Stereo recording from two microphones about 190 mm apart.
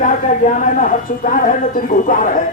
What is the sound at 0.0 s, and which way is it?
Speech, 40° left (ahead or behind).